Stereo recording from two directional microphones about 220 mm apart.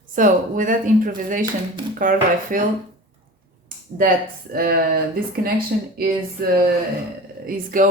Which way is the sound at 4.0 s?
40° right (ahead or behind).